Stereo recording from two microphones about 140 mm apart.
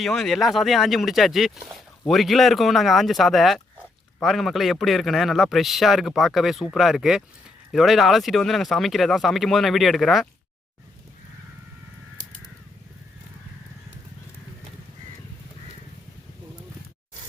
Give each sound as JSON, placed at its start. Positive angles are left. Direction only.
{"t": 0.0, "sound": "speech", "side_deg": 0}